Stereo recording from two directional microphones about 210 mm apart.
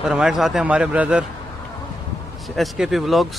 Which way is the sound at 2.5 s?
Centre (ahead or behind).